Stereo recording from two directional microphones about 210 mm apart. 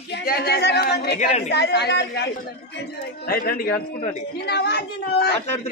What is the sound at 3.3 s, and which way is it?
A man's voice, 45° left (ahead or behind).